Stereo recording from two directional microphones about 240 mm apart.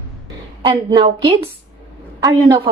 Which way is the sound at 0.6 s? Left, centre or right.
Right.